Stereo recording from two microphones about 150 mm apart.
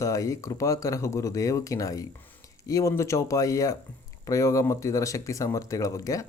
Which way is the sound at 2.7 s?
20° left (ahead or behind).